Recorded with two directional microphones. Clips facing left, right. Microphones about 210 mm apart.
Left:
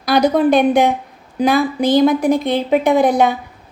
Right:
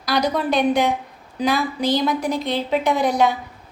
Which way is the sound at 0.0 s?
55° left (ahead or behind).